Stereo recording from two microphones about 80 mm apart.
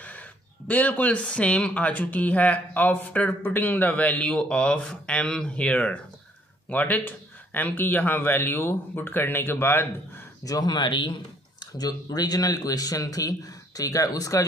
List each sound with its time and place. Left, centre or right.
0.0 s a man's voice: centre
10.4 s speech: left
11.6 s speech: left